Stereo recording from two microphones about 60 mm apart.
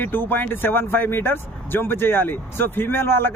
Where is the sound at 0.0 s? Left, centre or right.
Left.